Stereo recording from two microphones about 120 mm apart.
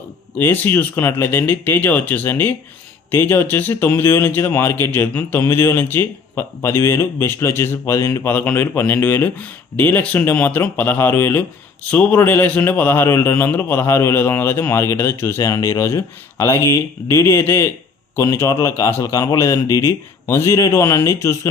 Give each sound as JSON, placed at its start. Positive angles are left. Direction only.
{"t": 0.3, "sound": "speech", "side_deg": 15}